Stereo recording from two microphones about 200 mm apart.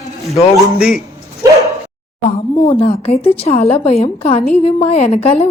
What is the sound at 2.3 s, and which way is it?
Speech, 30° left (ahead or behind).